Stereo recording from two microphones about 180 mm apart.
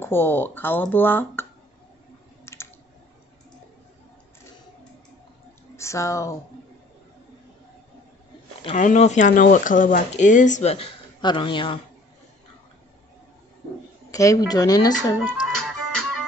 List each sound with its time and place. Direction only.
0.0 s speech: 10° left (ahead or behind)
2.4 s typing: 15° left (ahead or behind)
5.8 s speech: 15° left (ahead or behind)
8.7 s speech: 40° left (ahead or behind)
14.1 s a woman's voice: 20° left (ahead or behind)
15.5 s music: centre (ahead or behind)